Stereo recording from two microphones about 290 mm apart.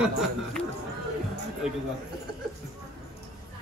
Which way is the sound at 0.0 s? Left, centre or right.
Centre.